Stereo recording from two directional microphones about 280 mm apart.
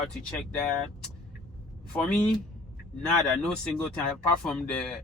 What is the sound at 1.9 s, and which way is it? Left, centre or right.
Speech, centre.